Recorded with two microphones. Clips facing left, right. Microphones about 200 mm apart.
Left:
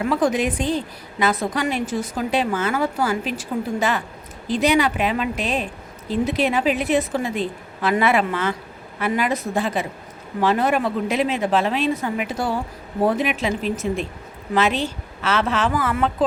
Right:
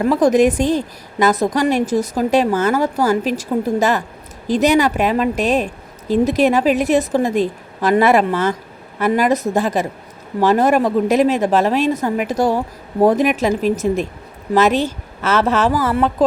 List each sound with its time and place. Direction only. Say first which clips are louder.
0.0 s a woman's voice: right 7 dB; 40° right (ahead or behind)